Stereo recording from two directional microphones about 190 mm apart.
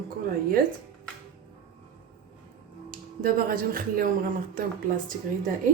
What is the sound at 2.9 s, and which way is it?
Speech, 50° right (ahead or behind).